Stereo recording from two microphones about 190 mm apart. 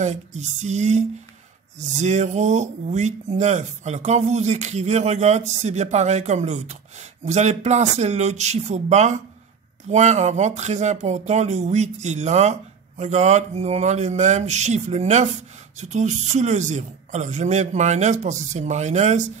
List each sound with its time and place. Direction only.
0.0 s speech: 35° right (ahead or behind)